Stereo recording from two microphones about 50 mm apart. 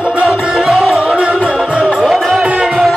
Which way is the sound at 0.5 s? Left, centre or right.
Centre.